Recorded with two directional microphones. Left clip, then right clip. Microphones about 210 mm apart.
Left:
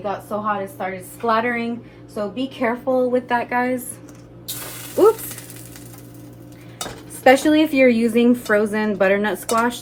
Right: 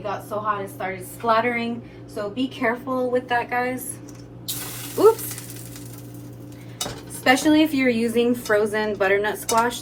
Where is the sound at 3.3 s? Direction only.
45° left (ahead or behind).